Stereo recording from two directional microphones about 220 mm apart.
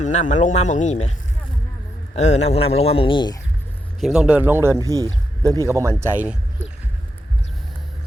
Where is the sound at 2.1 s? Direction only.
30° left (ahead or behind).